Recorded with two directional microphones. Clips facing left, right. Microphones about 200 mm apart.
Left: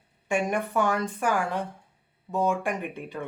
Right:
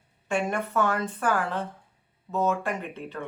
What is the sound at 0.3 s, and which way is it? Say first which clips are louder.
Speech: left 1 dB; 15° left (ahead or behind).